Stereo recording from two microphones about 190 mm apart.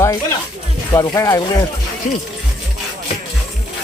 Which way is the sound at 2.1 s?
40° left (ahead or behind).